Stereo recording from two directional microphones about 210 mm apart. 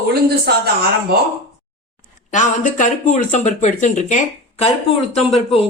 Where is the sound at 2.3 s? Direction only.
35° left (ahead or behind).